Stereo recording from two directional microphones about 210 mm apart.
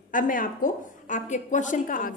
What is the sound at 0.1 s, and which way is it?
A woman's voice, 40° left (ahead or behind).